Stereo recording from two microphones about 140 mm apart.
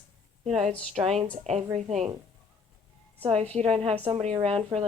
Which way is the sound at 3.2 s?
45° right (ahead or behind).